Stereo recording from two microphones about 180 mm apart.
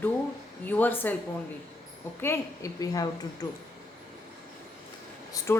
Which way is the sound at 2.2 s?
15° left (ahead or behind).